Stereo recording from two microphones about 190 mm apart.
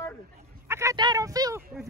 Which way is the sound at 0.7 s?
15° right (ahead or behind).